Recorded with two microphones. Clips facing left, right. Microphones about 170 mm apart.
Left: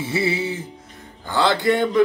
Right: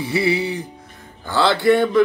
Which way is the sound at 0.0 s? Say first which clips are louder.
Right 3 dB; 25° left (ahead or behind).